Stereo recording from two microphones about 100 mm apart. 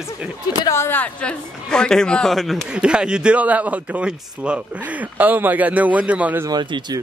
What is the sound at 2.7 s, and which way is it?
Speech, 10° right (ahead or behind).